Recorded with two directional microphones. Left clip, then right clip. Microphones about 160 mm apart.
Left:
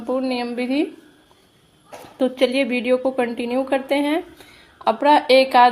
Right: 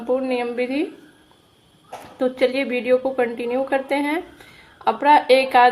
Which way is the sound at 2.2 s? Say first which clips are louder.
Left 1 dB; 35° left (ahead or behind).